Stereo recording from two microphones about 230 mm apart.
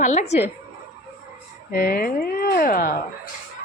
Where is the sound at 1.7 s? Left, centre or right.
Left.